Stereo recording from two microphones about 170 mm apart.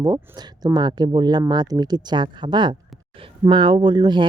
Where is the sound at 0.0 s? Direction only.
25° right (ahead or behind).